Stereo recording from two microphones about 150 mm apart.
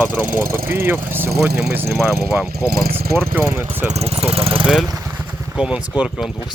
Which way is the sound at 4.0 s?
40° right (ahead or behind).